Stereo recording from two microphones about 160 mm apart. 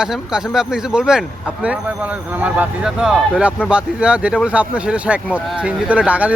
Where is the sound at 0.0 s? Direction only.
5° right (ahead or behind).